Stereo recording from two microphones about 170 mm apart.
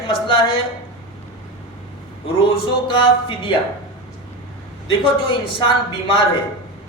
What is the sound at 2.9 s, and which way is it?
Speech, 30° left (ahead or behind).